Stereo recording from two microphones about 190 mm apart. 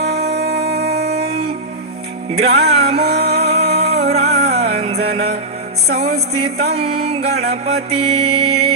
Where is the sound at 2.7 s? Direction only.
30° right (ahead or behind).